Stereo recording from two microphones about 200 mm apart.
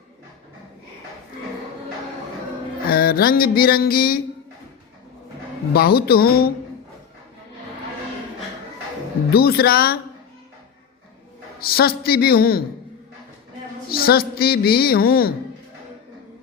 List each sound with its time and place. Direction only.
2.9 s a woman's voice: 50° left (ahead or behind)
5.7 s a woman's voice: 50° left (ahead or behind)
9.3 s a woman's voice: 50° left (ahead or behind)
11.7 s a woman's voice: 50° left (ahead or behind)
13.9 s a woman's voice: 50° left (ahead or behind)